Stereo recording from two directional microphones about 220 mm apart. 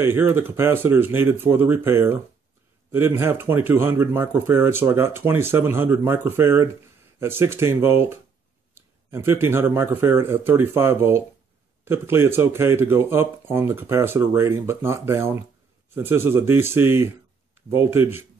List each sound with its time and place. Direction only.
0.0 s speech: 10° right (ahead or behind)